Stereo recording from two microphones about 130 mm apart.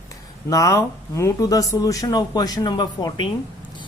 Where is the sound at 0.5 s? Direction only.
25° left (ahead or behind).